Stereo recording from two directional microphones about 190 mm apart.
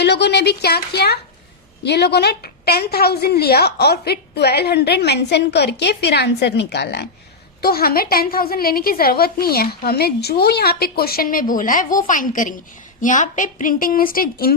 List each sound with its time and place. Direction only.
0.0 s a woman's voice: 60° left (ahead or behind)